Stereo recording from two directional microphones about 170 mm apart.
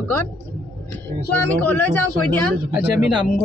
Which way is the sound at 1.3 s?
10° left (ahead or behind).